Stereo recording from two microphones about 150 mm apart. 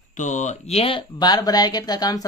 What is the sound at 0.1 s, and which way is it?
Speech, 55° left (ahead or behind).